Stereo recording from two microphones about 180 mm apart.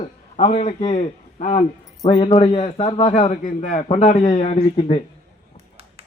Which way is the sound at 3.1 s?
45° left (ahead or behind).